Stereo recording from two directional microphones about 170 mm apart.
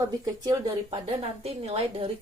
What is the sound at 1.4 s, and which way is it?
Speech, 35° right (ahead or behind).